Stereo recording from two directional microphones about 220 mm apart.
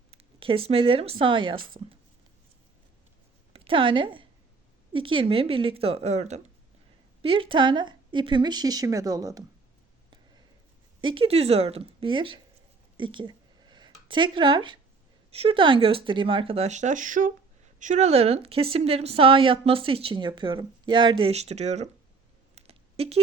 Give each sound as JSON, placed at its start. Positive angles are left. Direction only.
{"t": 0.1, "sound": "speech", "side_deg": -25}
{"t": 3.5, "sound": "a woman's voice", "side_deg": -25}
{"t": 11.0, "sound": "a woman's voice", "side_deg": -25}
{"t": 13.0, "sound": "a sound", "side_deg": -20}
{"t": 15.3, "sound": "a woman's voice", "side_deg": -25}
{"t": 22.5, "sound": "computer keyboard", "side_deg": -25}